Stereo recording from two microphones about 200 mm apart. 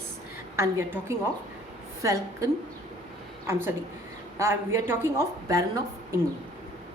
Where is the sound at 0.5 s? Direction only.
15° right (ahead or behind).